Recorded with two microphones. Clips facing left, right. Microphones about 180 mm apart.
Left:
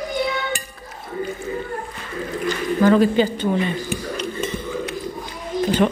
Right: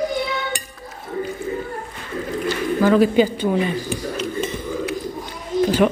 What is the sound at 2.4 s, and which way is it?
Speech, 5° right (ahead or behind).